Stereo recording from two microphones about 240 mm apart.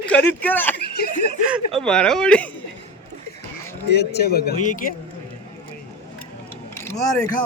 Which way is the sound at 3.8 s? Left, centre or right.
Left.